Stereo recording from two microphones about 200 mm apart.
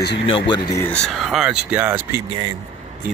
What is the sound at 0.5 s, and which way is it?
Speech, 20° left (ahead or behind).